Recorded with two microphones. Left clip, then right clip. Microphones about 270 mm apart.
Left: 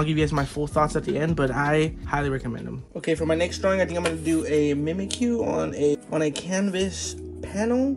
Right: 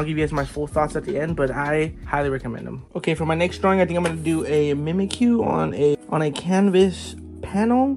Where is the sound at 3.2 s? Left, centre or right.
Right.